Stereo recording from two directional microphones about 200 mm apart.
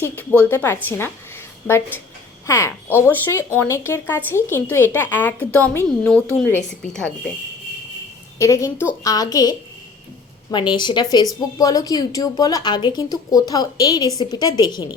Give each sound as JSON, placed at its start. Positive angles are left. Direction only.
{"t": 0.0, "sound": "speech", "side_deg": 10}
{"t": 8.4, "sound": "a woman's voice", "side_deg": 15}